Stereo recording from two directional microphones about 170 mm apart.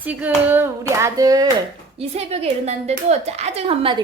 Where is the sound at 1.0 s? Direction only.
20° right (ahead or behind).